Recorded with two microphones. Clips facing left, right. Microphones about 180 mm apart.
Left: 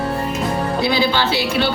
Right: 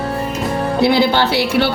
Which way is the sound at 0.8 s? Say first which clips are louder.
Right 6 dB; 60° right (ahead or behind).